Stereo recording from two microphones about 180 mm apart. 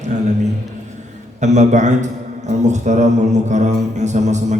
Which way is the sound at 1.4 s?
40° right (ahead or behind).